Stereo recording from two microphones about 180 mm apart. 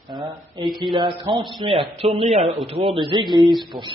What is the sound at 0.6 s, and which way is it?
Speech, centre (ahead or behind).